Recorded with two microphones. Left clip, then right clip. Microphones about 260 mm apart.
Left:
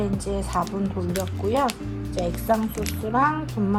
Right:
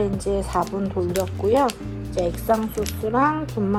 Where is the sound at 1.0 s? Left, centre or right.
Right.